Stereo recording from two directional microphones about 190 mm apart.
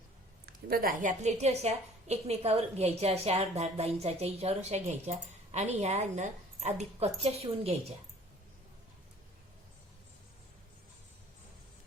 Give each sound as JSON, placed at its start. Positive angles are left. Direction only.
{"t": 0.7, "sound": "a woman's voice", "side_deg": -50}